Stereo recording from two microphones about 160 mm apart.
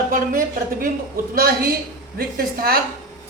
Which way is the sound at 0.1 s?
65° right (ahead or behind).